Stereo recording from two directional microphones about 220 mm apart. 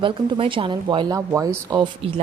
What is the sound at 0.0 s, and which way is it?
Speech, 25° right (ahead or behind).